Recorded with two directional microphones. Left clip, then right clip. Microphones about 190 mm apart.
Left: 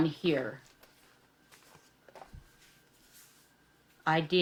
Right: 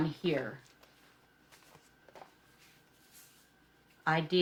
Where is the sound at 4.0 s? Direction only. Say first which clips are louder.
Left 2 dB; 40° left (ahead or behind).